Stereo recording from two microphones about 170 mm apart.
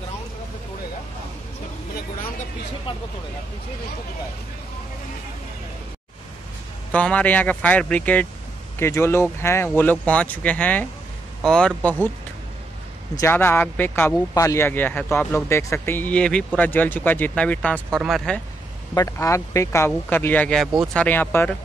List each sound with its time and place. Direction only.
6.9 s speech: 10° left (ahead or behind)
13.2 s speech: 15° left (ahead or behind)
18.9 s speech: 20° left (ahead or behind)